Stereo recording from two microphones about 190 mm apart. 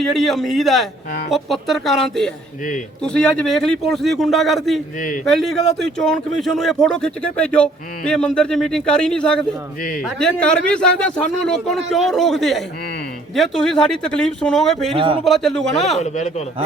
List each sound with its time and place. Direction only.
0.0 s speech: centre (ahead or behind)
4.9 s a man's voice: 45° left (ahead or behind)
5.2 s speech: centre (ahead or behind)
14.9 s a man's voice: 30° right (ahead or behind)
15.2 s speech: centre (ahead or behind)
16.0 s speech: 40° left (ahead or behind)